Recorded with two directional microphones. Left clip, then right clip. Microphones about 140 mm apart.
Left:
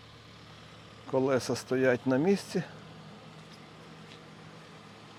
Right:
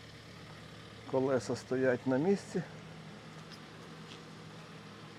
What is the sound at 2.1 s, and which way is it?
Speech, 50° left (ahead or behind).